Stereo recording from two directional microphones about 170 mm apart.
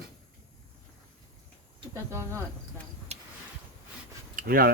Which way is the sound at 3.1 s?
40° right (ahead or behind).